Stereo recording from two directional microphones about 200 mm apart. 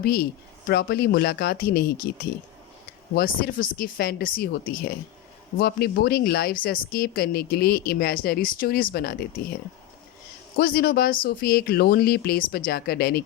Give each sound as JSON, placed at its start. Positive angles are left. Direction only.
{"t": 0.0, "sound": "speech", "side_deg": 50}
{"t": 3.2, "sound": "speech", "side_deg": 45}
{"t": 10.6, "sound": "speech", "side_deg": 45}